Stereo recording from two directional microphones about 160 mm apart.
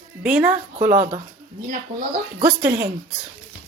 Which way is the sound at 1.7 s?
55° right (ahead or behind).